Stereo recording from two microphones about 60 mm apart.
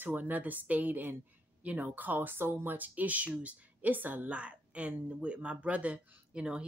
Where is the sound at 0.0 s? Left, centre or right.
Right.